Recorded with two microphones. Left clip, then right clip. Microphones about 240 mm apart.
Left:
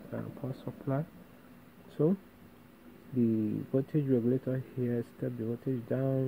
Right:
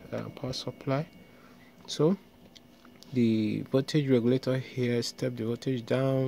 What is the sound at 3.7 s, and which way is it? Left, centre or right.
Speech, right.